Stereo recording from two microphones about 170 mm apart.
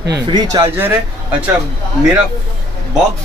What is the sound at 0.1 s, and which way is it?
Speech, 25° right (ahead or behind).